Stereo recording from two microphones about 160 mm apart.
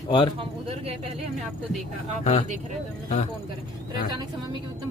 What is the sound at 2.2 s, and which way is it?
Speech, 40° left (ahead or behind).